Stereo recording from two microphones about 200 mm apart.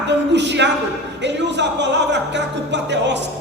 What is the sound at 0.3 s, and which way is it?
A man's voice, 60° right (ahead or behind).